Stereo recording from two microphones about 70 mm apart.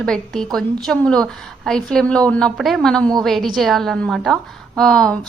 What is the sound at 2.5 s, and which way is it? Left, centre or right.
A woman's voice, centre.